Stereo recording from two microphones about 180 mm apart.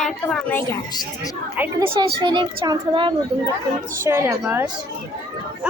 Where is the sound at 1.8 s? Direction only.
25° right (ahead or behind).